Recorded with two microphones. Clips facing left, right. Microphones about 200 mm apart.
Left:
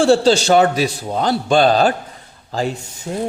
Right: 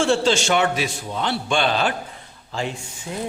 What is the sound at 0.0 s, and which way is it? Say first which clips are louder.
A man's voice: left 6 dB; 35° left (ahead or behind).